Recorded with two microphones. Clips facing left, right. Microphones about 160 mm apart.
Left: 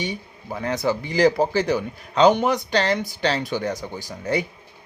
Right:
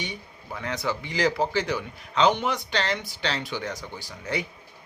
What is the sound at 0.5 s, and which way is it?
Speech, 40° left (ahead or behind).